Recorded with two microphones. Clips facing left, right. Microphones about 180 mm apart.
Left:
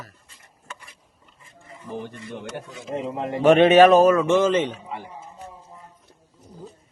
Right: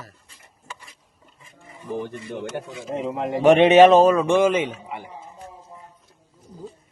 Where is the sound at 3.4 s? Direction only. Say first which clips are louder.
Right 1 dB; 15° right (ahead or behind).